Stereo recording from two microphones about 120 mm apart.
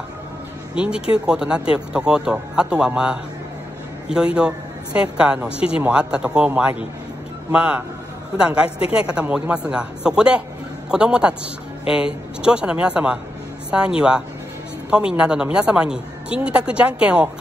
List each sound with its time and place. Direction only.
0.7 s a woman's voice: 10° right (ahead or behind)
8.4 s a woman's voice: 10° right (ahead or behind)
8.6 s a woman's voice: 55° left (ahead or behind)
8.9 s a woman's voice: 10° right (ahead or behind)